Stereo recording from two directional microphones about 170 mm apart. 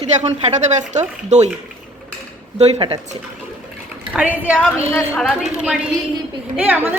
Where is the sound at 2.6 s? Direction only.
35° right (ahead or behind).